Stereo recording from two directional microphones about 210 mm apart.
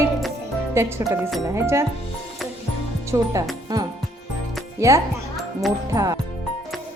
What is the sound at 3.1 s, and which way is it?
Speech, 15° right (ahead or behind).